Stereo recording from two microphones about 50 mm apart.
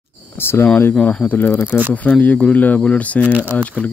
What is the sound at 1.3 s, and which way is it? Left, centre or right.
Speech, left.